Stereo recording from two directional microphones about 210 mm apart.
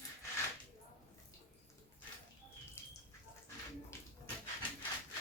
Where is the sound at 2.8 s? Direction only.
10° left (ahead or behind).